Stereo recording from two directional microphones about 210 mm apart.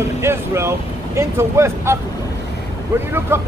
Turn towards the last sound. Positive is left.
turn(degrees=-10)  # may be behind; listen again after turning